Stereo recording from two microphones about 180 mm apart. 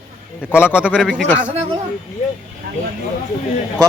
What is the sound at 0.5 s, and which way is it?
Speech, 15° left (ahead or behind).